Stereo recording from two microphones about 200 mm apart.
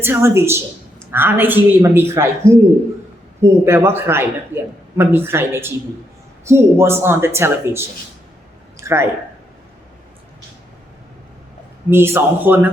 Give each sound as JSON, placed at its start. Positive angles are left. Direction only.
{"t": 0.0, "sound": "speech", "side_deg": -10}
{"t": 8.8, "sound": "a sound", "side_deg": -15}
{"t": 11.9, "sound": "speech", "side_deg": -10}